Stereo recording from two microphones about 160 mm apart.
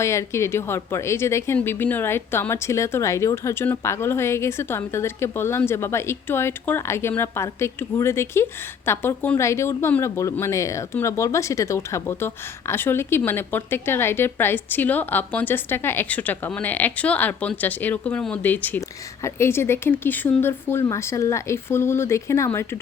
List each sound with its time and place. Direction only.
0.0 s speech: 15° left (ahead or behind)